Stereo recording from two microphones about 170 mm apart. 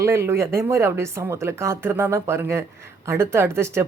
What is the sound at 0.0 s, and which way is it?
Speech, 15° right (ahead or behind).